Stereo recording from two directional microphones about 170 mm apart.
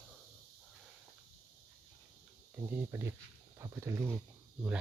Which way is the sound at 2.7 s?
15° right (ahead or behind).